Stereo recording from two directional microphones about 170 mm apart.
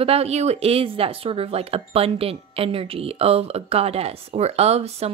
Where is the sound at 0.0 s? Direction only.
35° right (ahead or behind).